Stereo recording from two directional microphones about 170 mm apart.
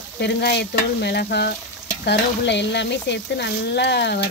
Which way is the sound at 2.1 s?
90° left.